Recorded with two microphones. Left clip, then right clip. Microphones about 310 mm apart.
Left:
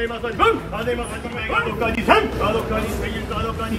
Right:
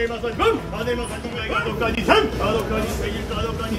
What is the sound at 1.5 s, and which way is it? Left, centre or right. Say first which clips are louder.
Speech: left 2 dB; centre.